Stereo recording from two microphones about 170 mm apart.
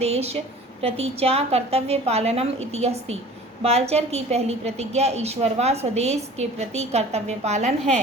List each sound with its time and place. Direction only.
0.0 s a woman's voice: 35° right (ahead or behind)